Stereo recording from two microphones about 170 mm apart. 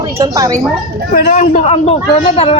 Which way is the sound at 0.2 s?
20° right (ahead or behind).